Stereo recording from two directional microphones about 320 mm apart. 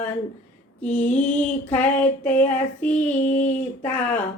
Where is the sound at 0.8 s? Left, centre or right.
Centre.